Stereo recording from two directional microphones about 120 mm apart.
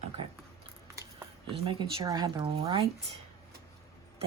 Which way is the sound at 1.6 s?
45° right (ahead or behind).